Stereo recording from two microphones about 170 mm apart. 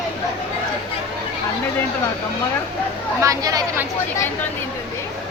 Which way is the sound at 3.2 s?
20° right (ahead or behind).